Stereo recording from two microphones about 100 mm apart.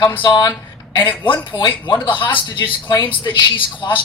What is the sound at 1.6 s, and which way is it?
Speech, 55° left (ahead or behind).